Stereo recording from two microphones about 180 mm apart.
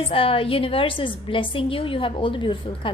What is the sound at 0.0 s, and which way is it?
A woman's voice, 30° left (ahead or behind).